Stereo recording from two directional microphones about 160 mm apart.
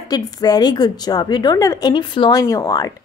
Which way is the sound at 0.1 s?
25° left (ahead or behind).